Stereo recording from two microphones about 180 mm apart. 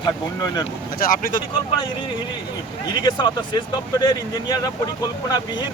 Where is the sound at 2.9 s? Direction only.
20° left (ahead or behind).